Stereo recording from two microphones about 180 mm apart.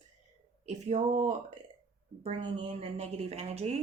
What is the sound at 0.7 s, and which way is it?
Speech, 40° right (ahead or behind).